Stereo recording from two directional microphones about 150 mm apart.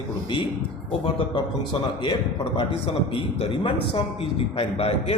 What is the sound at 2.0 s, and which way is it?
A man's voice, 35° left (ahead or behind).